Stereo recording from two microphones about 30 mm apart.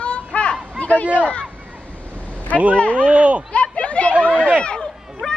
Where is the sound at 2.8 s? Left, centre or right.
Left.